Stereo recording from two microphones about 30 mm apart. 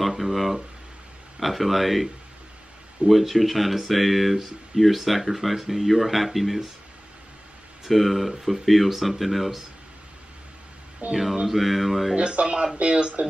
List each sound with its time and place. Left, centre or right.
0.1 s a sound: centre
1.4 s speech: centre
3.1 s speech: centre
7.8 s speech: centre
11.0 s speech: right
11.4 s speech: centre
12.2 s speech: right
13.2 s speech: right